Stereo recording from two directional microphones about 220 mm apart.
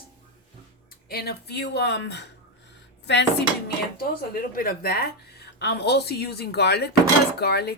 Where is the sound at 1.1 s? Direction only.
45° left (ahead or behind).